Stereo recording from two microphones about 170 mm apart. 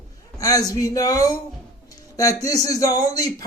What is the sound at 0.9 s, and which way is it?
Speech, 20° left (ahead or behind).